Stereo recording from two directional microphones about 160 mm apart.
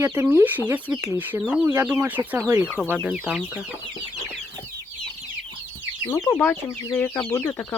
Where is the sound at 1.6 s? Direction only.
15° right (ahead or behind).